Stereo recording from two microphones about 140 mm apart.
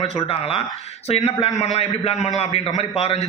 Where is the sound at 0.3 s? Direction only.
45° left (ahead or behind).